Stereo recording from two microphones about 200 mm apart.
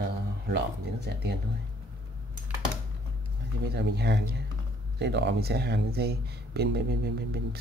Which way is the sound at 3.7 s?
55° right (ahead or behind).